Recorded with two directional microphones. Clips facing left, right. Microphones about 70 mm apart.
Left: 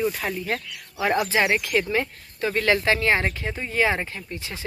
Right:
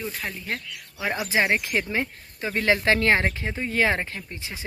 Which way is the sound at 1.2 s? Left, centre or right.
Right.